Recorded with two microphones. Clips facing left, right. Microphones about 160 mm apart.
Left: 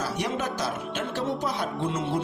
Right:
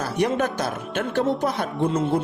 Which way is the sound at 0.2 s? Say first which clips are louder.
Right 10 dB; 55° right (ahead or behind).